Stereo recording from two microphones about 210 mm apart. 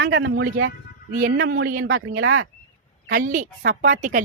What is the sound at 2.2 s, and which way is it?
Speech, 65° right (ahead or behind).